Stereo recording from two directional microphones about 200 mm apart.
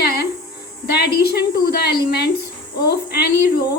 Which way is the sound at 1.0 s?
50° left (ahead or behind).